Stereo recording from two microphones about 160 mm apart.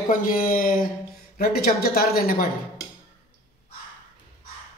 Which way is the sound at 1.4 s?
70° left (ahead or behind).